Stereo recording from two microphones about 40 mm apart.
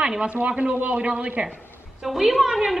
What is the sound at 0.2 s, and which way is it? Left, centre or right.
Speech, right.